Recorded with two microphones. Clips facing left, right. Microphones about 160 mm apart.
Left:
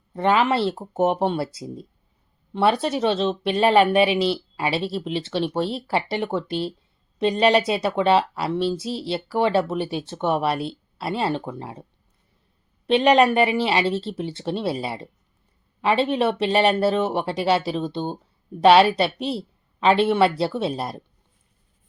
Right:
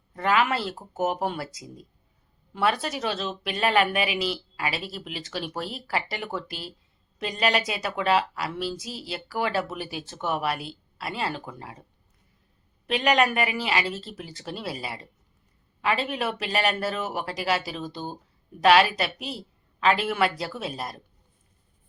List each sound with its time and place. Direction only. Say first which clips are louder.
0.1 s a woman's voice: left 4 dB; 30° left (ahead or behind)
12.9 s a woman's voice: left 7 dB; 30° left (ahead or behind)